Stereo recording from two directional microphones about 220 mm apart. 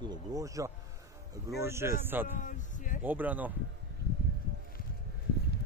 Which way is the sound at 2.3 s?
35° left (ahead or behind).